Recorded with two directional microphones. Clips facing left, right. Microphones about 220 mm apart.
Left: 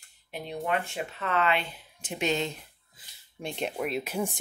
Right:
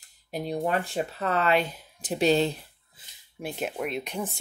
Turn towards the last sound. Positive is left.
turn(degrees=5)  # may be behind; listen again after turning